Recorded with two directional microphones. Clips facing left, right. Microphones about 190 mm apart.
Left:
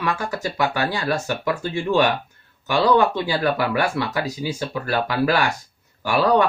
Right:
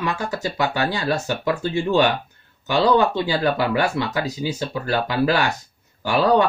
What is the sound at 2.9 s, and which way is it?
Speech, 20° right (ahead or behind).